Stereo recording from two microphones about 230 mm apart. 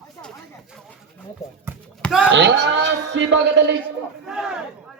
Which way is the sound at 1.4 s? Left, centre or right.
Centre.